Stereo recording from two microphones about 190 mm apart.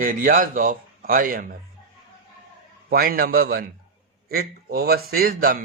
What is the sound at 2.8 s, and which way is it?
A man's voice, 50° right (ahead or behind).